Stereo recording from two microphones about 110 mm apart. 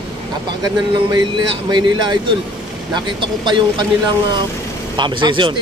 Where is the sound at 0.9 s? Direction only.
45° right (ahead or behind).